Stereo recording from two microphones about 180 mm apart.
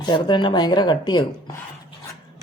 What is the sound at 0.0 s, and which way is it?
Speech, 25° left (ahead or behind).